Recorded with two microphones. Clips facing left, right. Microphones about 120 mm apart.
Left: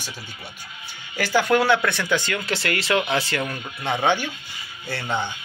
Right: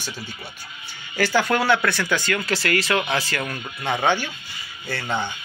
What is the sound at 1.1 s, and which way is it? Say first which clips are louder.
Speech: left 1 dB; 15° left (ahead or behind).